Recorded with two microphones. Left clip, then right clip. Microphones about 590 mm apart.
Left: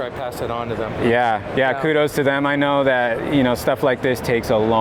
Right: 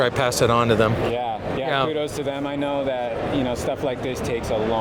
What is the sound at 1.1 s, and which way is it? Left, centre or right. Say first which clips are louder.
Speech: left 8 dB; left.